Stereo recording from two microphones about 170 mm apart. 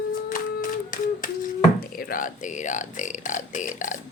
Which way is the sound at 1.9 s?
55° left (ahead or behind).